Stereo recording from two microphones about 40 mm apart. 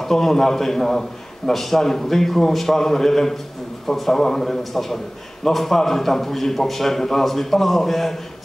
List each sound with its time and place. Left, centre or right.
0.1 s a man's voice: centre